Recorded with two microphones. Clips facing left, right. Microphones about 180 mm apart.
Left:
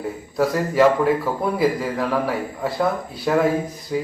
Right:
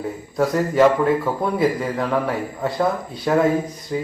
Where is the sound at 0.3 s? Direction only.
Centre (ahead or behind).